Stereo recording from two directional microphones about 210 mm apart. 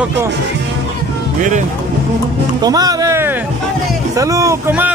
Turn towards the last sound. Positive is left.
turn(degrees=-10)  # may be behind; listen again after turning